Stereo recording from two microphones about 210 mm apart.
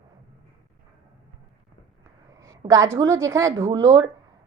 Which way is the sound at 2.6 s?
15° right (ahead or behind).